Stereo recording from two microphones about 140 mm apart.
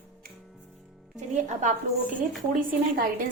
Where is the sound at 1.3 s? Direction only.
60° right (ahead or behind).